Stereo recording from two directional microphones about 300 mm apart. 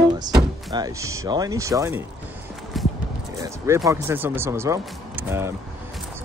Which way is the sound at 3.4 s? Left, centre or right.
Centre.